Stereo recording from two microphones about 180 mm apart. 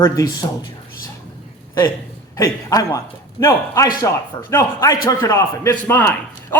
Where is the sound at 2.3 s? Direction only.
20° left (ahead or behind).